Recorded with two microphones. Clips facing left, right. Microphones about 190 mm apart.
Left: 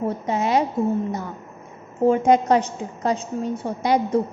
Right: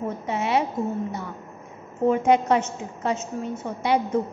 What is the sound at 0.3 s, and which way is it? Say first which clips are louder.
Speech: left 3 dB; 40° left (ahead or behind).